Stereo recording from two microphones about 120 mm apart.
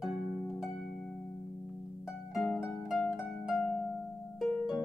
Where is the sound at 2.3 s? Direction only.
Centre (ahead or behind).